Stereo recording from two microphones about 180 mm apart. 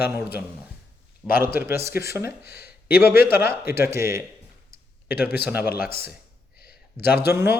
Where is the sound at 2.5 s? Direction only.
60° left (ahead or behind).